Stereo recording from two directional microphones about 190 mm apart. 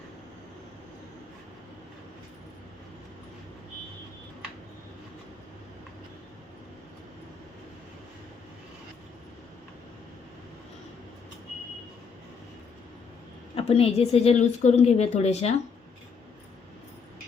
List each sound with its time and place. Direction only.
13.6 s a woman's voice: 30° left (ahead or behind)